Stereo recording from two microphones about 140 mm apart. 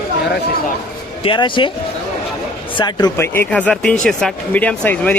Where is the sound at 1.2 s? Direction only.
35° left (ahead or behind).